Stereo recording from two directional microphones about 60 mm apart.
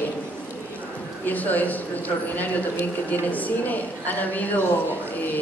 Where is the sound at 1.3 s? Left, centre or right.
Left.